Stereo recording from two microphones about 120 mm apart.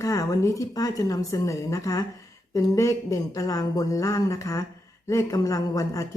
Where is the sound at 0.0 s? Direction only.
25° left (ahead or behind).